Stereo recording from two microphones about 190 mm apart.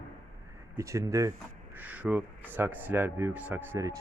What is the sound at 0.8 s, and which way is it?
Speech, 15° right (ahead or behind).